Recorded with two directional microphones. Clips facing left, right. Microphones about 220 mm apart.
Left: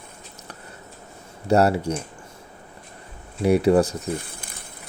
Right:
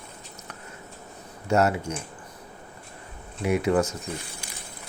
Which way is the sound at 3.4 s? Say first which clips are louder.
Left 6 dB; 35° left (ahead or behind).